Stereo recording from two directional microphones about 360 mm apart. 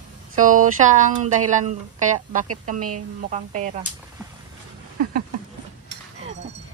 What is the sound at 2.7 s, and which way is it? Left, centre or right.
Speech, right.